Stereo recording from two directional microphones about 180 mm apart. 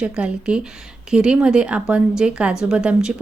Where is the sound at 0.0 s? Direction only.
5° right (ahead or behind).